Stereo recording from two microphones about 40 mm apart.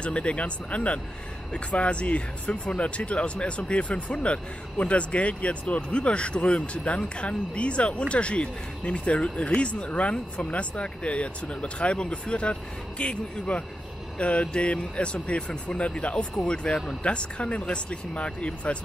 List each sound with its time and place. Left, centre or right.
0.0 s speech: left